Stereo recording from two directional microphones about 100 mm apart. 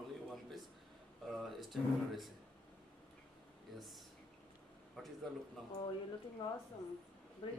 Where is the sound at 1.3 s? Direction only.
Centre (ahead or behind).